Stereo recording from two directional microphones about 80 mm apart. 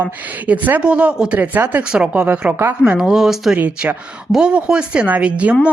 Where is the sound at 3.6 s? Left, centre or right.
Centre.